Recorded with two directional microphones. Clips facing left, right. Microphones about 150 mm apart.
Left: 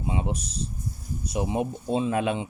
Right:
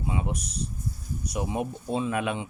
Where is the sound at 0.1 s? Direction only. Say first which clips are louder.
Left 2 dB; 25° left (ahead or behind).